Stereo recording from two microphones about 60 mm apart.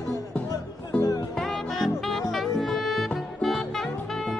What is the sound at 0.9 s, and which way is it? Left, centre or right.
Music, centre.